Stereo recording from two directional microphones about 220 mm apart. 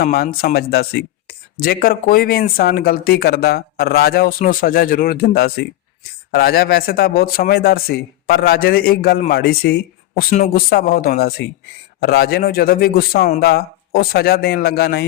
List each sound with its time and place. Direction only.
0.0 s speech: 45° left (ahead or behind)